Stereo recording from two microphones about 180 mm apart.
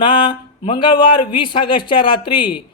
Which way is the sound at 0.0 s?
30° left (ahead or behind).